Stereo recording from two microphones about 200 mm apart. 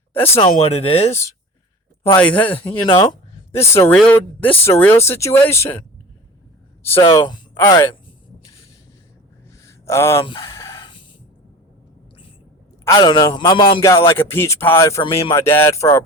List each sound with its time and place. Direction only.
0.1 s speech: 10° left (ahead or behind)
0.5 s speech: 30° left (ahead or behind)
2.1 s speech: 5° left (ahead or behind)
3.0 s a sound: 25° left (ahead or behind)
3.6 s speech: 10° left (ahead or behind)
7.1 s a man's voice: 20° left (ahead or behind)
9.6 s a sound: 15° left (ahead or behind)
12.8 s a man's voice: 20° left (ahead or behind)